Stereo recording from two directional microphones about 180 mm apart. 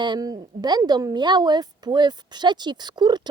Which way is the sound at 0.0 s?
25° right (ahead or behind).